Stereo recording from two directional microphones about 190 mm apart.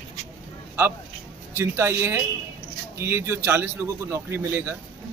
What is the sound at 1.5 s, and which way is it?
A man's voice, 10° right (ahead or behind).